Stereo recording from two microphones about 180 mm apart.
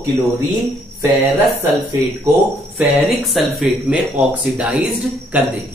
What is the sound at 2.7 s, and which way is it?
Speech, centre (ahead or behind).